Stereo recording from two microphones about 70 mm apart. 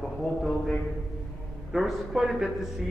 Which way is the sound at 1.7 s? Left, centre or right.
Centre.